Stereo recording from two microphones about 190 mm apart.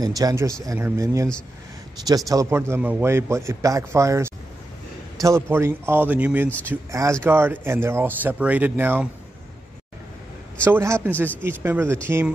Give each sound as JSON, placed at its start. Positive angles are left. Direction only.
{"t": 0.0, "sound": "a man's voice", "side_deg": -20}
{"t": 10.6, "sound": "a man's voice", "side_deg": -15}